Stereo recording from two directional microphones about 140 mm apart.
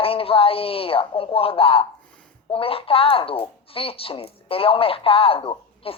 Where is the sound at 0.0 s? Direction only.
40° left (ahead or behind).